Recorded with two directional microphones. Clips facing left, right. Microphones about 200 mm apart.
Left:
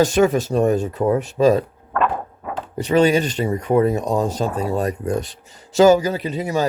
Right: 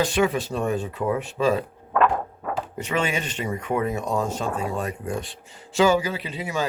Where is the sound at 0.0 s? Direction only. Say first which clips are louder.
Left 6 dB; 45° left (ahead or behind).